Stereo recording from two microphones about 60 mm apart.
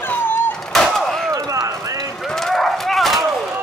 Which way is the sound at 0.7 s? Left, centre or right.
Centre.